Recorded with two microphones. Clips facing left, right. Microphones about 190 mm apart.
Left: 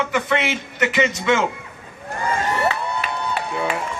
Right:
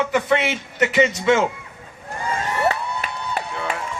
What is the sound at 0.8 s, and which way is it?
Speech, 35° right (ahead or behind).